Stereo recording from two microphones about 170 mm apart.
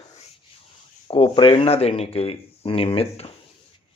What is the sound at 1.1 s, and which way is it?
Speech, 35° left (ahead or behind).